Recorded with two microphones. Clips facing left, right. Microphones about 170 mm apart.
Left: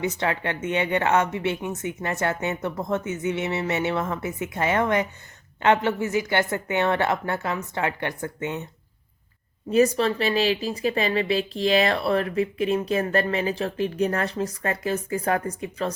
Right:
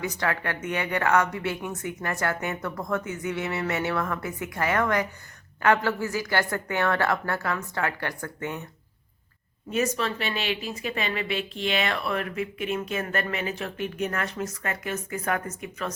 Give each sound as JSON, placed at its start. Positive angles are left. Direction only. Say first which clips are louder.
{"t": 0.0, "sound": "a woman's voice", "louder": "left 3 dB", "side_deg": 25}
{"t": 9.7, "sound": "speech", "louder": "left 7 dB", "side_deg": 35}